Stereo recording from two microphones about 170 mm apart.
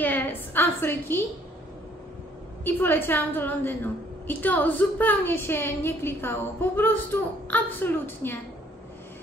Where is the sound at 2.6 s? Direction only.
10° left (ahead or behind).